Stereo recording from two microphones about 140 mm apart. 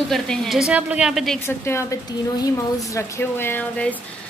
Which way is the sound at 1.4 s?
20° left (ahead or behind).